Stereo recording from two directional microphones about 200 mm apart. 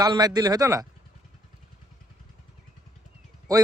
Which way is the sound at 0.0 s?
20° right (ahead or behind).